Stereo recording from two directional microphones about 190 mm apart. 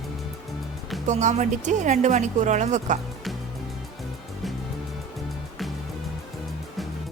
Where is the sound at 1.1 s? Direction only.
40° right (ahead or behind).